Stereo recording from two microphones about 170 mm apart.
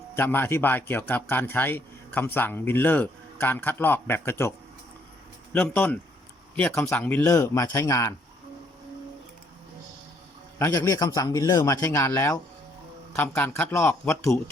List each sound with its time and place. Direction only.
0.1 s a man's voice: 15° left (ahead or behind)
5.5 s a man's voice: 10° left (ahead or behind)
10.6 s a man's voice: 20° left (ahead or behind)